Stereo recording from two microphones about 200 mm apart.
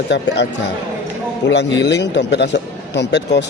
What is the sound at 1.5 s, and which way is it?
A man's voice, 60° left (ahead or behind).